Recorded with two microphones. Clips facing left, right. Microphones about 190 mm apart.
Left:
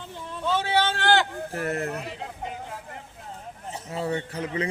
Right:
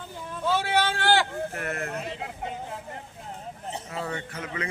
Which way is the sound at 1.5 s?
35° left (ahead or behind).